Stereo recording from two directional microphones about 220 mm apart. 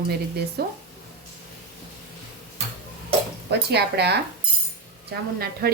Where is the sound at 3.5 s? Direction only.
50° right (ahead or behind).